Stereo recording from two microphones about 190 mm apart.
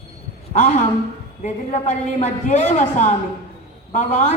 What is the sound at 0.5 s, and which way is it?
A man's voice, 40° left (ahead or behind).